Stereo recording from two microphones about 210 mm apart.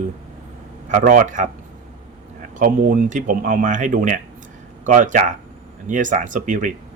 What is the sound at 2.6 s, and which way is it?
Speech, 40° right (ahead or behind).